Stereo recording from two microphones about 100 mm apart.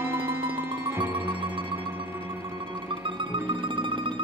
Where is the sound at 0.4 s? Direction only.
20° right (ahead or behind).